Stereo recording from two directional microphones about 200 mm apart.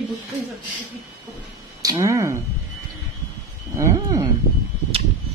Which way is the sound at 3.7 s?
15° right (ahead or behind).